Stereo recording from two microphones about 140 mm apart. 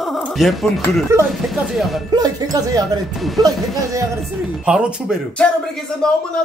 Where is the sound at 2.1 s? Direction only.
25° right (ahead or behind).